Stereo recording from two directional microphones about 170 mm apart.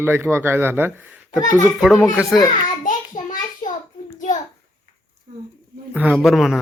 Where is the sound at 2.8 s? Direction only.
50° left (ahead or behind).